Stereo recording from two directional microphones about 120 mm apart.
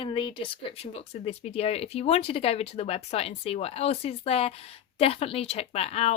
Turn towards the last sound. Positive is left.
turn(degrees=60)  # may be behind; listen again after turning